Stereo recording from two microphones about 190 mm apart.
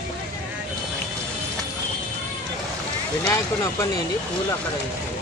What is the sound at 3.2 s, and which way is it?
Speech, 15° left (ahead or behind).